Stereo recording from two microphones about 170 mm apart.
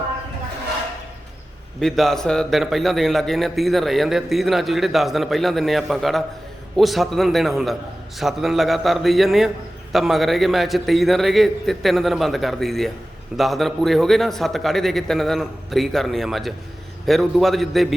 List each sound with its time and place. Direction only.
1.8 s a man's voice: centre (ahead or behind)